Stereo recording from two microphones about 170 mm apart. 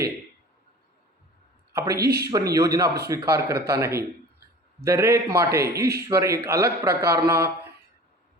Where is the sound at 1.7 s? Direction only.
20° right (ahead or behind).